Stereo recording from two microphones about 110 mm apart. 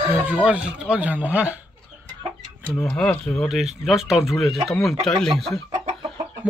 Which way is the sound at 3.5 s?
5° right (ahead or behind).